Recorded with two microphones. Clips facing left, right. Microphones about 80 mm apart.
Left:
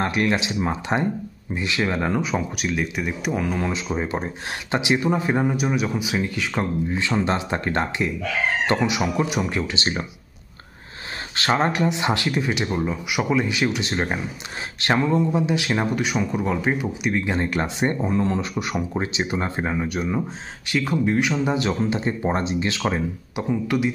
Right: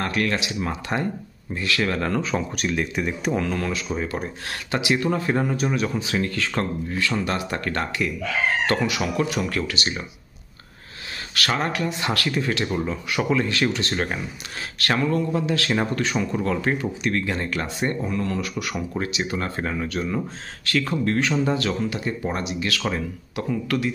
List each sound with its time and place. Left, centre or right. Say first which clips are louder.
0.0 s speech: left 2 dB; left
11.3 s speech: left 4 dB; left